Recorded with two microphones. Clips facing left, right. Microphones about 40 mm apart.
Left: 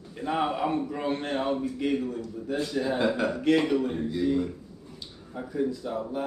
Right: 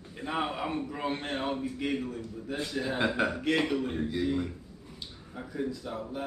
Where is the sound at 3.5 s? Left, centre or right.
Centre.